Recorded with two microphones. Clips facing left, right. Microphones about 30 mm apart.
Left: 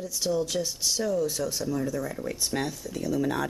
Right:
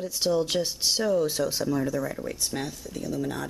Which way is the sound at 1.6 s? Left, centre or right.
Centre.